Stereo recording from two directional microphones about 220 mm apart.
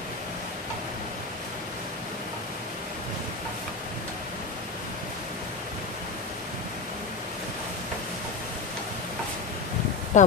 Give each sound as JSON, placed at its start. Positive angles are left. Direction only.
{"t": 10.1, "sound": "speech", "side_deg": 35}